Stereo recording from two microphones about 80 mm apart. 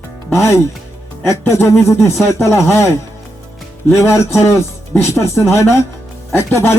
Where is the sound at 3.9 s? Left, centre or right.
Left.